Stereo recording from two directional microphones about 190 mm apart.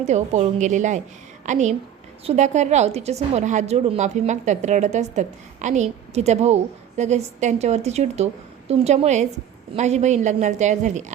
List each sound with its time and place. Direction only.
0.0 s a woman's voice: 35° right (ahead or behind)